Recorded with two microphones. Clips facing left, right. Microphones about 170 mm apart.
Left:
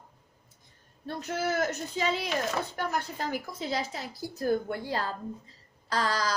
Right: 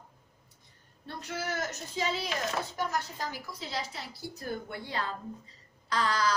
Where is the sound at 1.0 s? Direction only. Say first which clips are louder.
Left 6 dB; 50° left (ahead or behind).